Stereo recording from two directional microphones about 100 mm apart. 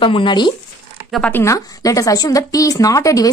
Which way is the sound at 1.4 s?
35° left (ahead or behind).